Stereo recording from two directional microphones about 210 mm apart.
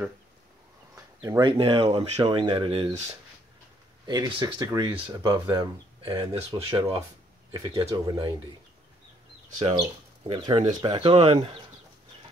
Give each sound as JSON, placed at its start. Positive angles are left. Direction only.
{"t": 0.9, "sound": "a sound", "side_deg": -10}
{"t": 1.4, "sound": "speech", "side_deg": -25}
{"t": 4.0, "sound": "speech", "side_deg": -20}
{"t": 10.2, "sound": "speech", "side_deg": -25}